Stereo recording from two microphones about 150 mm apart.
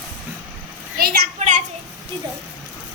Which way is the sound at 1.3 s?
55° right (ahead or behind).